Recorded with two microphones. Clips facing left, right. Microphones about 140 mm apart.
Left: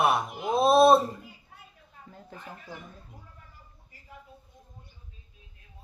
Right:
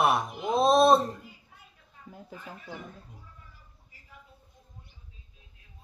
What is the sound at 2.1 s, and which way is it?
Speech, 10° right (ahead or behind).